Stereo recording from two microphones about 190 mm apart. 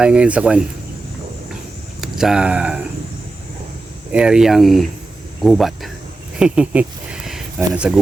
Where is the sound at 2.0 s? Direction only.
Centre (ahead or behind).